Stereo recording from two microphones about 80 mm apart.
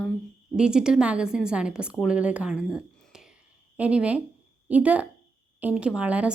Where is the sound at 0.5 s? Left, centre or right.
Centre.